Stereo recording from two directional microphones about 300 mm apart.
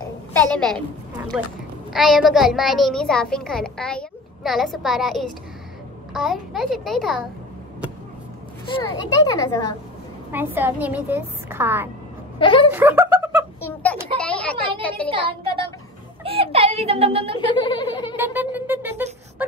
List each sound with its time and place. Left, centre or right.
0.3 s a woman's voice: centre
8.9 s speech: centre
10.3 s a woman's voice: centre
12.4 s speech: centre
12.7 s speech: centre
14.1 s a sound: centre
14.8 s speech: centre
15.0 s a woman's voice: centre
17.5 s speech: centre
18.1 s music: centre